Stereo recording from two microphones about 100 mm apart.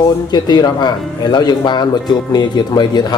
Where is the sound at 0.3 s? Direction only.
45° left (ahead or behind).